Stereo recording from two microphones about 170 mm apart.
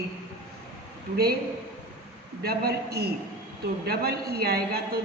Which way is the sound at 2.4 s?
65° right (ahead or behind).